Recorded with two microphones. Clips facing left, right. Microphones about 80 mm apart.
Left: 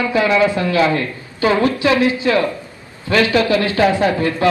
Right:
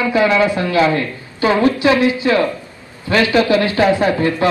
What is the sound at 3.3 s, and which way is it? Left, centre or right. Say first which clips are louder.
A man's voice: right 2 dB; right.